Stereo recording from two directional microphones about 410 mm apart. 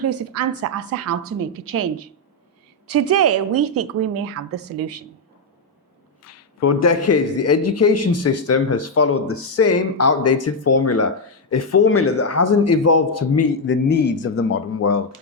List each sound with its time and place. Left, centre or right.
0.0 s a woman's voice: right
6.2 s a man's voice: left